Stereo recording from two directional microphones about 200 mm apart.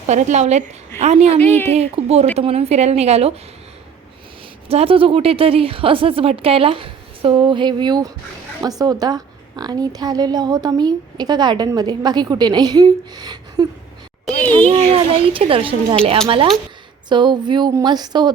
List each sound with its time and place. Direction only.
0.1 s speech: 35° right (ahead or behind)
1.4 s a woman's voice: 10° left (ahead or behind)
1.7 s speech: 30° right (ahead or behind)
4.7 s speech: 30° right (ahead or behind)
14.7 s speech: 25° right (ahead or behind)
17.1 s speech: 20° right (ahead or behind)